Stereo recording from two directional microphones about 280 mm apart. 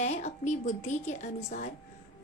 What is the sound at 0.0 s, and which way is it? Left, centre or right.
A woman's voice, left.